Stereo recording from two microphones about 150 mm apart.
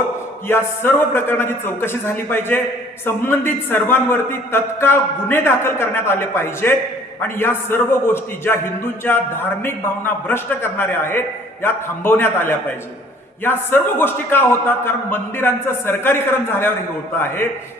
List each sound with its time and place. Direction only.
0.4 s a man's voice: 15° left (ahead or behind)